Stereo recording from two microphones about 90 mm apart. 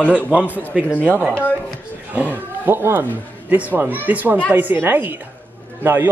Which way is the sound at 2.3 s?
25° right (ahead or behind).